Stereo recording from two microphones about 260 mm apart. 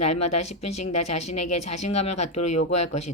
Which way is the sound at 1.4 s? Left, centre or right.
Left.